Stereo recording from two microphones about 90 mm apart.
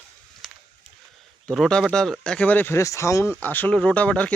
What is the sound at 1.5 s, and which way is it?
Speech, 5° left (ahead or behind).